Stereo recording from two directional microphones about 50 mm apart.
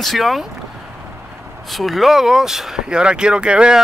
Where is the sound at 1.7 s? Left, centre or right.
Centre.